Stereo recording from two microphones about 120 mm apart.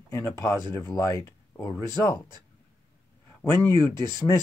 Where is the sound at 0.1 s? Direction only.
25° left (ahead or behind).